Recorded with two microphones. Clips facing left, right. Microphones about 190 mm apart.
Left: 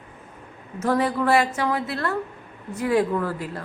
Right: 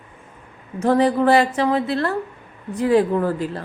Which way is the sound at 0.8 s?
30° right (ahead or behind).